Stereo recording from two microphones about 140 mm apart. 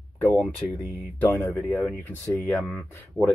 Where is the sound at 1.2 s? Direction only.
15° left (ahead or behind).